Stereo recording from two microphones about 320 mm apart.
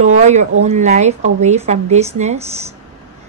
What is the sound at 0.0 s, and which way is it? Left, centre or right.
A woman's voice, right.